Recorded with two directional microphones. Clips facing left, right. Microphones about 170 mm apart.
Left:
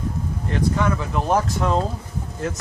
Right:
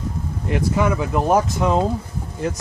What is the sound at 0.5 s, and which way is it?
Speech, 10° right (ahead or behind).